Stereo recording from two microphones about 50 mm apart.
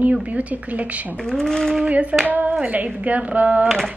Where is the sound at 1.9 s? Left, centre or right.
Right.